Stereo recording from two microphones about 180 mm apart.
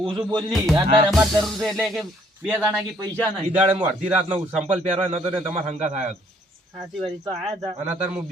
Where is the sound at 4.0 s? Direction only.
45° right (ahead or behind).